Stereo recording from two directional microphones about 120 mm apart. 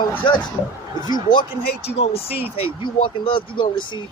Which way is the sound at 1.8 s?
60° left (ahead or behind).